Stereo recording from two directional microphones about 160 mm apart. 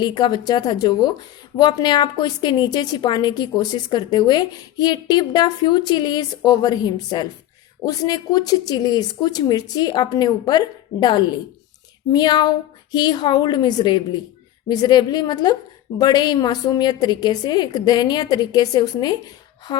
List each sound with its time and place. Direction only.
0.0 s a woman's voice: 25° left (ahead or behind)